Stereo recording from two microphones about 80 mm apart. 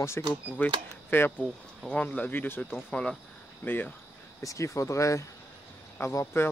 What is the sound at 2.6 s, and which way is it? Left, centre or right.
Speech, centre.